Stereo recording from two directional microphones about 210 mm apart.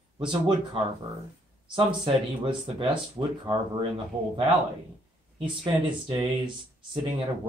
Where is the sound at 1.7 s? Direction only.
20° right (ahead or behind).